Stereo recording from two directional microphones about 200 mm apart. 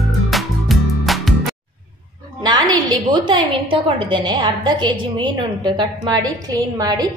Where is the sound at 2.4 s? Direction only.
20° right (ahead or behind).